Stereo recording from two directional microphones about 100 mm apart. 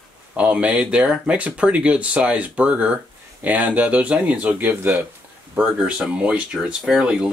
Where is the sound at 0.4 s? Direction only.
10° right (ahead or behind).